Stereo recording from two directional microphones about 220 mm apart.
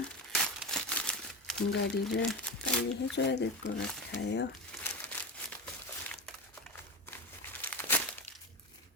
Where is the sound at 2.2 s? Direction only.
5° left (ahead or behind).